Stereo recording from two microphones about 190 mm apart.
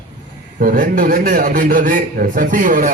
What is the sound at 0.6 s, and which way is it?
A man's voice, 45° right (ahead or behind).